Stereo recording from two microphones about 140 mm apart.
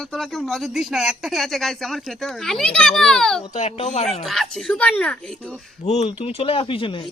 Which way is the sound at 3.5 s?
55° left (ahead or behind).